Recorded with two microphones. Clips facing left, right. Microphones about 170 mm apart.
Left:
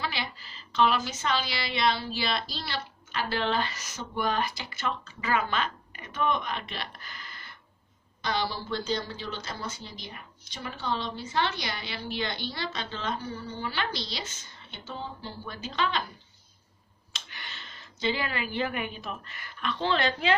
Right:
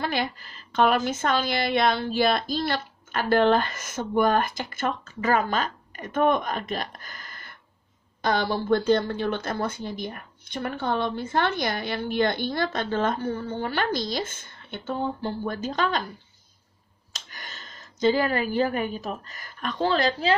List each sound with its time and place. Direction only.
0.0 s speech: 50° right (ahead or behind)
17.1 s a woman's voice: 45° right (ahead or behind)